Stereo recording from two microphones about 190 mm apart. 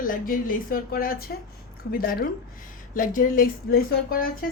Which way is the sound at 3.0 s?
45° left (ahead or behind).